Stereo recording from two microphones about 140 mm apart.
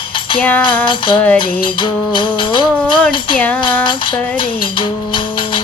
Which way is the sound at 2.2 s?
35° left (ahead or behind).